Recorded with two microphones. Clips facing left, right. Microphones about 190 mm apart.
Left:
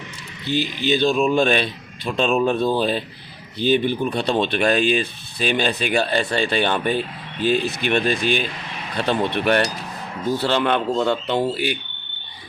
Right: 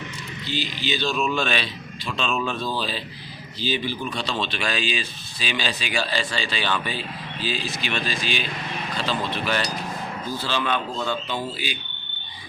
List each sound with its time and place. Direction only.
0.4 s a man's voice: 60° left (ahead or behind)